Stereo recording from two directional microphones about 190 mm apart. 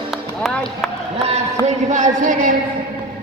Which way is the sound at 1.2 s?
35° right (ahead or behind).